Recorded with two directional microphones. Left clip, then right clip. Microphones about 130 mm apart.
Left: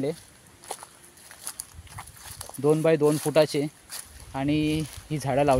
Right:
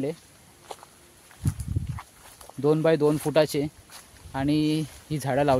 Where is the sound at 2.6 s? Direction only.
25° right (ahead or behind).